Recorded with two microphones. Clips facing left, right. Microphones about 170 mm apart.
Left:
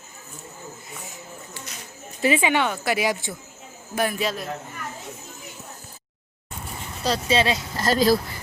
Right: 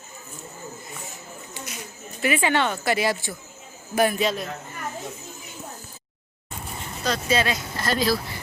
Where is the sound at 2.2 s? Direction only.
20° left (ahead or behind); by 4.5 s 5° left (ahead or behind).